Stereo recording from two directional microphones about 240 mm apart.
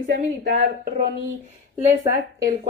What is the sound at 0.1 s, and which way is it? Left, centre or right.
Speech, right.